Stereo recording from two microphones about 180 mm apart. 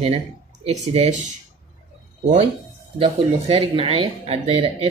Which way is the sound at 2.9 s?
30° right (ahead or behind).